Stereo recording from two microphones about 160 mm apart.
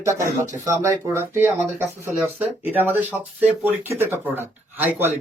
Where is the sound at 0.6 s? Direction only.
20° right (ahead or behind).